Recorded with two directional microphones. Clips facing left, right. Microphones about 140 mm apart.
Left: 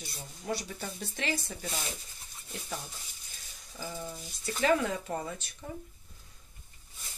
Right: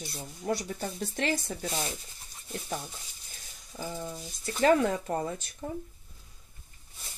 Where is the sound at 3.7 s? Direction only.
35° right (ahead or behind).